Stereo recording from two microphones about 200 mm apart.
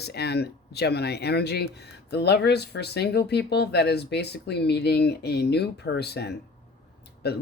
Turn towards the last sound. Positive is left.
turn(degrees=55)  # may be behind; listen again after turning